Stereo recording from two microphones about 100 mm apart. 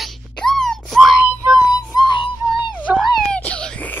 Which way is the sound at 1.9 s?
40° left (ahead or behind).